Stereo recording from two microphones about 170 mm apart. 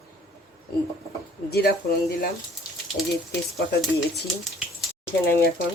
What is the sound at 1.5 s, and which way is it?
Speech, 65° left (ahead or behind).